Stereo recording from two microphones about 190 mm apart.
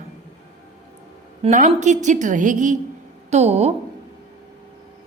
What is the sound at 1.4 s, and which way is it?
A woman's voice, 40° right (ahead or behind).